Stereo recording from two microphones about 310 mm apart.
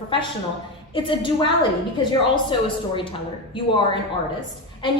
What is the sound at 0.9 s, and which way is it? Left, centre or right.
A woman's voice, centre.